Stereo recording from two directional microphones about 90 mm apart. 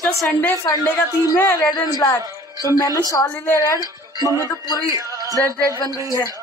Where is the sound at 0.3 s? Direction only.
20° left (ahead or behind).